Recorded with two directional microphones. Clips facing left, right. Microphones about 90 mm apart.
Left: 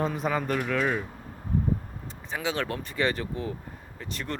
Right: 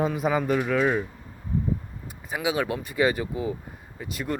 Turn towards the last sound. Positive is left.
turn(degrees=-10)  # may be behind; listen again after turning